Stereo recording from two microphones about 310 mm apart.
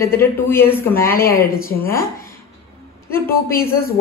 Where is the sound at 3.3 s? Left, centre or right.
Left.